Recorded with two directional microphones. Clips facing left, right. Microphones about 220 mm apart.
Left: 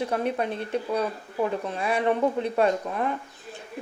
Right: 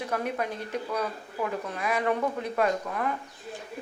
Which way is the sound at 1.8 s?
30° left (ahead or behind).